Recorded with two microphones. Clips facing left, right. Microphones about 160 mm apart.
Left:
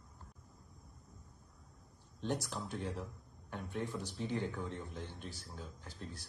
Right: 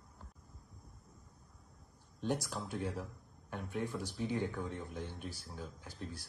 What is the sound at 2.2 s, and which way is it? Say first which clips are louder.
Speech: right 2 dB; centre (ahead or behind).